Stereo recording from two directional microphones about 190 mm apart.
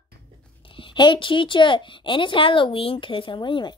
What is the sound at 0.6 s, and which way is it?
Speech, 25° left (ahead or behind).